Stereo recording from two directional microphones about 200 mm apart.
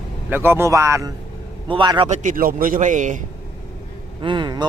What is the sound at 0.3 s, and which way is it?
A man's voice, 10° right (ahead or behind).